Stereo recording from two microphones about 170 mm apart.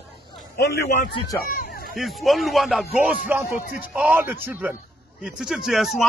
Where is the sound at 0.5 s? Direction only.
70° left (ahead or behind).